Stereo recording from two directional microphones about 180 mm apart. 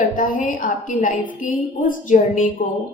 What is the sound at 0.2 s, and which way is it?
A woman's voice, 50° left (ahead or behind).